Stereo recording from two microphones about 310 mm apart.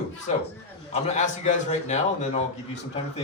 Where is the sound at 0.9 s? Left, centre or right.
Left.